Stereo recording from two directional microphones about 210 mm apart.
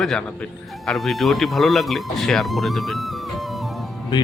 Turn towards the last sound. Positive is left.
turn(degrees=20)  # may be behind; listen again after turning